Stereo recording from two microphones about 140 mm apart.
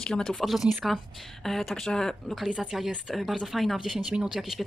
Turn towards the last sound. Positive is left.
turn(degrees=0)  # may be behind; listen again after turning